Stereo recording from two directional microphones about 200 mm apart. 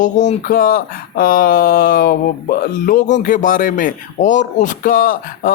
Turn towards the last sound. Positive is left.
turn(degrees=45)  # may be behind; listen again after turning